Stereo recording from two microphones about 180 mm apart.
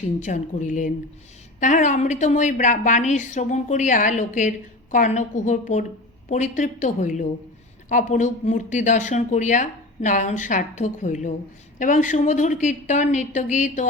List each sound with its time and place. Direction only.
0.2 s a woman's voice: 45° left (ahead or behind)